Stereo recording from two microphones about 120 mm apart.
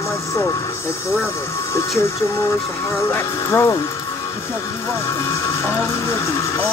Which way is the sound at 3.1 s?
20° left (ahead or behind).